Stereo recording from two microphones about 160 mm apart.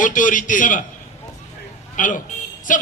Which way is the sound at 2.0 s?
55° left (ahead or behind).